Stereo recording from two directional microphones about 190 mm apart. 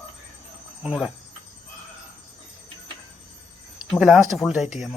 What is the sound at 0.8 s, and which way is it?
Speech, centre (ahead or behind).